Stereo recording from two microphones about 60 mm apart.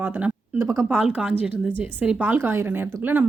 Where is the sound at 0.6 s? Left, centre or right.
Right.